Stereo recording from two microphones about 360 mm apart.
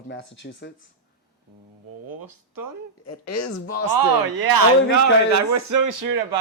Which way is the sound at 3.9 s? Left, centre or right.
Right.